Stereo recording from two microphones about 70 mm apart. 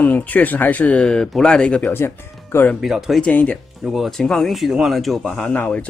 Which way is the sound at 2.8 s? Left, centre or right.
Centre.